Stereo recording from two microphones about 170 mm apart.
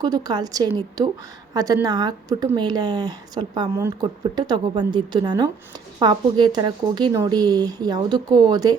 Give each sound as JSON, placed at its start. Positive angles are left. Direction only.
{"t": 0.0, "sound": "a woman's voice", "side_deg": -25}